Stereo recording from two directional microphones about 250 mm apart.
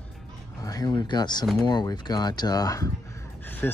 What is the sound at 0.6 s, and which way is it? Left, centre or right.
Speech, centre.